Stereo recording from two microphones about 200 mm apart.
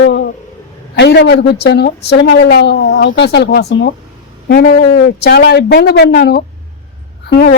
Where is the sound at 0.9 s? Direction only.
60° left (ahead or behind).